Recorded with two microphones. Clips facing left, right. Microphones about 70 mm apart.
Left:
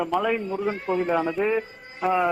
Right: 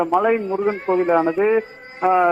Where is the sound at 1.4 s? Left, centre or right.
Right.